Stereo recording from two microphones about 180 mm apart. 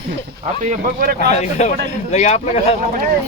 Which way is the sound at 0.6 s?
45° right (ahead or behind).